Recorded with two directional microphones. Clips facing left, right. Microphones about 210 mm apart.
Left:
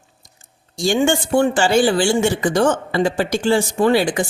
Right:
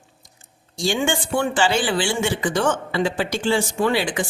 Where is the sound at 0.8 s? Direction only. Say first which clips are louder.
Left 5 dB; 40° left (ahead or behind).